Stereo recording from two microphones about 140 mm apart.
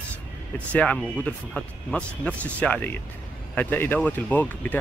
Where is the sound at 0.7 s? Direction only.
5° left (ahead or behind).